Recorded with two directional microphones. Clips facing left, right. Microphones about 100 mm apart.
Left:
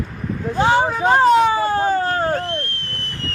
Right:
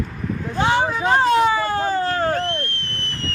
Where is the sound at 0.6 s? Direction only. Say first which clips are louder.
Left 3 dB; 30° left (ahead or behind).